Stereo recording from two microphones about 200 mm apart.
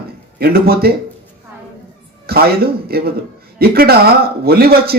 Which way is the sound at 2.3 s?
50° right (ahead or behind).